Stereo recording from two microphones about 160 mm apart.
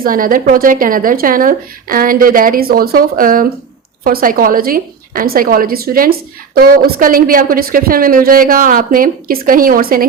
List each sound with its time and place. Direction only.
0.0 s a woman's voice: 60° right (ahead or behind)